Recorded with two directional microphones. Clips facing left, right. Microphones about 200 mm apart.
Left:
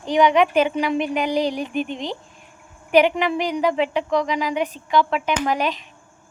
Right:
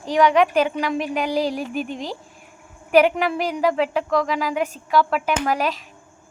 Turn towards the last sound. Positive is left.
turn(degrees=0)  # may be behind; listen again after turning